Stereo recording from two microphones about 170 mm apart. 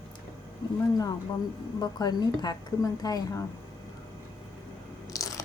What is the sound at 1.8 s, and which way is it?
A woman's voice, 20° left (ahead or behind).